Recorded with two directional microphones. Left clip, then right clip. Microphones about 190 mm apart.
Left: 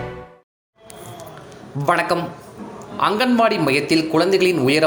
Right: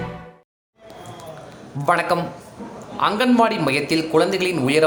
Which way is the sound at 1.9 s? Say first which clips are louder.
Even; 5° left (ahead or behind).